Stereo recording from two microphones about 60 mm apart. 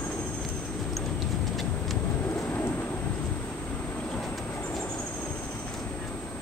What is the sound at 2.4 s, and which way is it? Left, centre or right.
Thunder, left.